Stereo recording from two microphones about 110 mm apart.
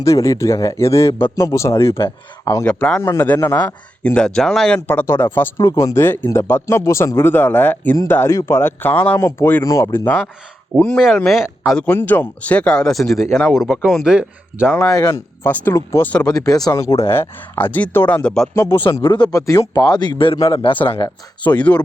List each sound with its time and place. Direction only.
0.0 s speech: 30° left (ahead or behind)
2.6 s speech: 10° left (ahead or behind)
3.0 s speech: 20° left (ahead or behind)
4.0 s speech: 10° left (ahead or behind)
4.9 s speech: 20° left (ahead or behind)
10.8 s speech: 10° left (ahead or behind)
11.9 s speech: 15° left (ahead or behind); by 14.7 s 10° right (ahead or behind)
14.8 s a man's voice: 25° left (ahead or behind)
17.0 s speech: 20° left (ahead or behind)
18.5 s speech: 25° left (ahead or behind)
19.0 s a man's voice: 40° left (ahead or behind)
21.6 s speech: 10° left (ahead or behind)